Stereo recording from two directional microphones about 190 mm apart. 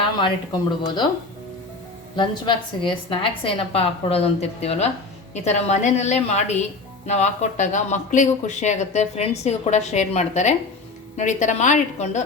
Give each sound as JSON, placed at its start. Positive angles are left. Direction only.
{"t": 0.2, "sound": "speech", "side_deg": 25}
{"t": 2.1, "sound": "speech", "side_deg": 25}